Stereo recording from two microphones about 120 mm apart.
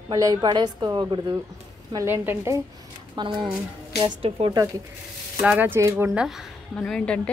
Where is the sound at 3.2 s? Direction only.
40° right (ahead or behind).